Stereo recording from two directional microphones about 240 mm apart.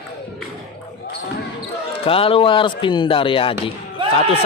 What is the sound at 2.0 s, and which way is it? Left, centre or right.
Speech, left.